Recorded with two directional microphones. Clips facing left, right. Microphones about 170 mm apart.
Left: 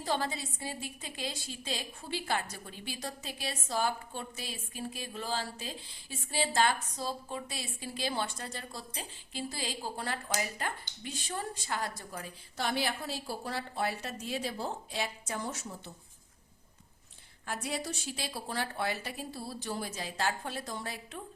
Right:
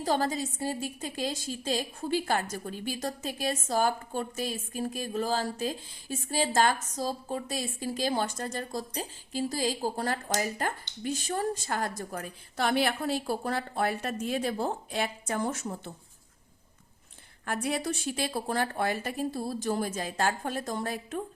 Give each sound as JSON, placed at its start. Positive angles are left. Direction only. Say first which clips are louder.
{"t": 0.0, "sound": "a woman's voice", "louder": "right 6 dB", "side_deg": -40}
{"t": 17.4, "sound": "a woman's voice", "louder": "right 6 dB", "side_deg": -55}